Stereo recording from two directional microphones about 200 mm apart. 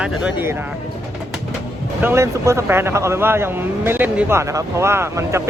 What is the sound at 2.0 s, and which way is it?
Speech, 10° right (ahead or behind).